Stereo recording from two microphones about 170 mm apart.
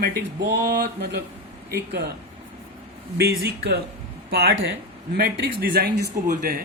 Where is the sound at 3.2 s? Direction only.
70° right (ahead or behind).